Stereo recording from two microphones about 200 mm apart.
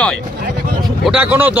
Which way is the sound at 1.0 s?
5° right (ahead or behind).